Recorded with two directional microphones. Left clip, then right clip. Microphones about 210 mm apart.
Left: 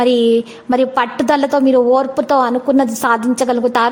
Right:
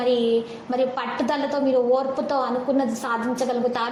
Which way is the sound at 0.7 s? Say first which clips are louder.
Left 9 dB; 50° left (ahead or behind).